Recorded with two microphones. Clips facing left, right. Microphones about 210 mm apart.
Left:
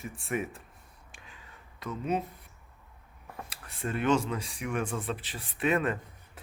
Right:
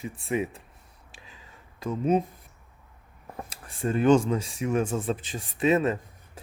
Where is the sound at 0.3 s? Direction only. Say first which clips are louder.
Right 5 dB; 20° right (ahead or behind).